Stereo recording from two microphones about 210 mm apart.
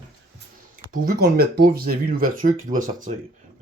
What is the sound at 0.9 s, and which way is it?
Speech, 45° right (ahead or behind).